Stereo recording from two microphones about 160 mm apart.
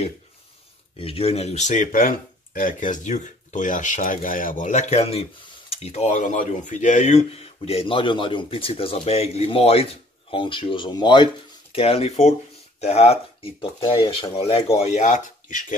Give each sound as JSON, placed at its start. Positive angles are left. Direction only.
{"t": 0.9, "sound": "speech", "side_deg": 35}
{"t": 14.8, "sound": "speech", "side_deg": 45}